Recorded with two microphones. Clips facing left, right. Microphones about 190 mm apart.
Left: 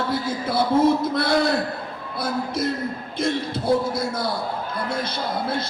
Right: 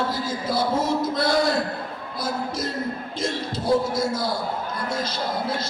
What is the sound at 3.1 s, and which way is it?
Speech, 60° left (ahead or behind).